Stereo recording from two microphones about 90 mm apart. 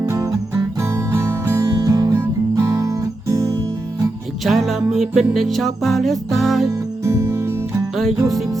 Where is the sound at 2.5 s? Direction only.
40° right (ahead or behind).